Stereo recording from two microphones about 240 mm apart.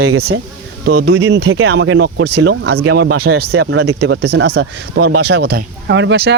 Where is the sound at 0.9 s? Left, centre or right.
Right.